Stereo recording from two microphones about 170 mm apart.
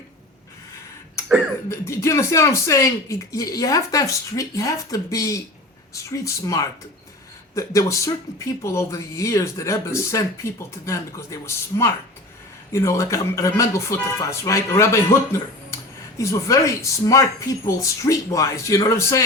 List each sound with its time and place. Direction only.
1.7 s speech: 15° left (ahead or behind)